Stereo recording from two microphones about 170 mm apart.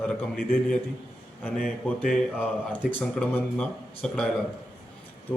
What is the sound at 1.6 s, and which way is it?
Speech, centre (ahead or behind).